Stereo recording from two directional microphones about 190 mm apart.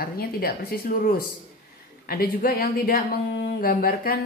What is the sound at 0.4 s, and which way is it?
Speech, 50° left (ahead or behind).